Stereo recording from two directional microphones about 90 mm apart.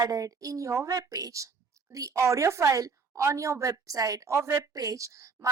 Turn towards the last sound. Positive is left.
turn(degrees=-35)  # may be behind; listen again after turning